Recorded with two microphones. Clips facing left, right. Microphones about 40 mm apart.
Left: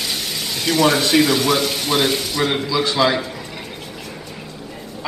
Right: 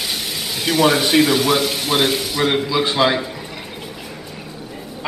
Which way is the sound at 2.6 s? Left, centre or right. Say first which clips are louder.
Right 1 dB; centre.